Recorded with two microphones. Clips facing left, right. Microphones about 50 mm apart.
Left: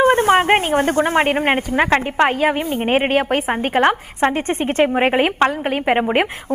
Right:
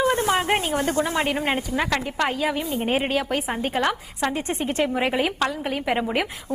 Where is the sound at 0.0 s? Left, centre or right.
Left.